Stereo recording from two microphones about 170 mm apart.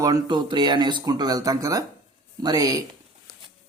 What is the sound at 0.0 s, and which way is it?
Speech, 25° right (ahead or behind).